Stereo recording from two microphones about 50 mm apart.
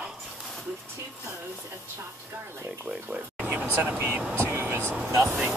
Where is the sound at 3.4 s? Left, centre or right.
Right.